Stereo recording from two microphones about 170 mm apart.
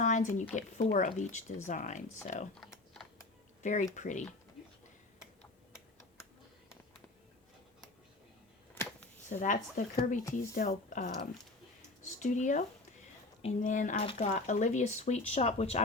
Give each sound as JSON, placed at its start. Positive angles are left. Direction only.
{"t": 0.0, "sound": "a sound", "side_deg": 45}
{"t": 0.9, "sound": "speech", "side_deg": 45}
{"t": 3.6, "sound": "speech", "side_deg": 45}
{"t": 8.7, "sound": "a sound", "side_deg": 10}
{"t": 9.3, "sound": "speech", "side_deg": 50}
{"t": 10.7, "sound": "speech", "side_deg": 45}